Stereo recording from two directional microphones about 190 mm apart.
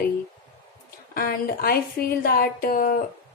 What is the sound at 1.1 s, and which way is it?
Speech, 50° left (ahead or behind).